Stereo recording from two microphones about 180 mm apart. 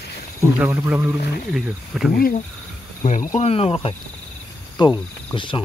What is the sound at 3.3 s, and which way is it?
Speech, 35° left (ahead or behind).